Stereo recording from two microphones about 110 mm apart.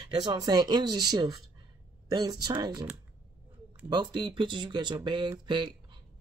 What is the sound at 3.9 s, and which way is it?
Speech, 45° right (ahead or behind).